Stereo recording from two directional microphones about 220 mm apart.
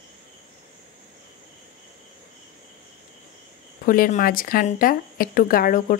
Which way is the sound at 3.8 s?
40° left (ahead or behind).